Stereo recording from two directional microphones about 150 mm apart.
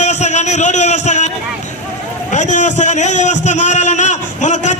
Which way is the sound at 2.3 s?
55° left (ahead or behind).